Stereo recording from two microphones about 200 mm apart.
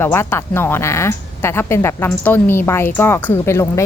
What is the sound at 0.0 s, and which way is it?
Speech, 10° left (ahead or behind).